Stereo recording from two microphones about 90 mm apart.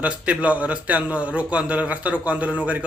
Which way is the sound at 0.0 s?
15° right (ahead or behind).